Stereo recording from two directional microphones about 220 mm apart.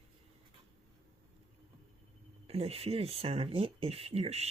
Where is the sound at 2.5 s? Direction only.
30° right (ahead or behind).